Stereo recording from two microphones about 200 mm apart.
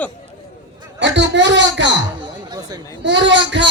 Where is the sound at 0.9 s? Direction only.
60° right (ahead or behind).